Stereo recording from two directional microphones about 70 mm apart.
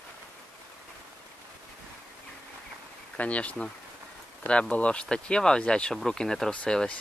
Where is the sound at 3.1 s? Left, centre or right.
Centre.